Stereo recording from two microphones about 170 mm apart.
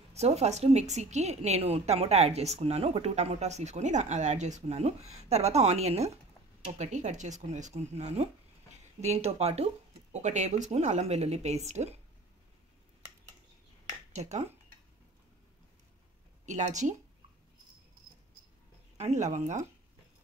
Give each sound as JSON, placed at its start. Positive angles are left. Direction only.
{"t": 0.1, "sound": "a woman's voice", "side_deg": -40}
{"t": 14.1, "sound": "a woman's voice", "side_deg": -40}
{"t": 16.4, "sound": "speech", "side_deg": -45}
{"t": 18.9, "sound": "speech", "side_deg": -40}